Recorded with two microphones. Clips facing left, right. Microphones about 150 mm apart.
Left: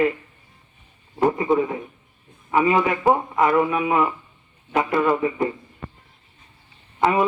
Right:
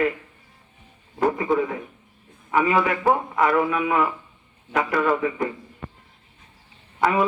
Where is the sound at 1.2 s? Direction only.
25° left (ahead or behind).